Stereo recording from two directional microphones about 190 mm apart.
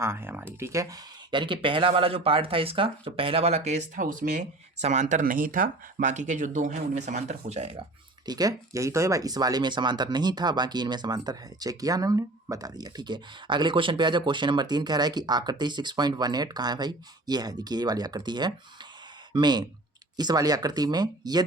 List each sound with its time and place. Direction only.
0.0 s speech: 10° right (ahead or behind); by 7.8 s 35° right (ahead or behind)
8.3 s speech: 20° right (ahead or behind)